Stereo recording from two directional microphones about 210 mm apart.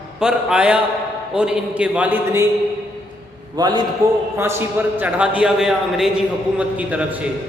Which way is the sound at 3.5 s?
20° right (ahead or behind).